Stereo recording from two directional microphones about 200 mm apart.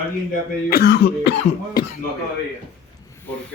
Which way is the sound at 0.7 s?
50° left (ahead or behind).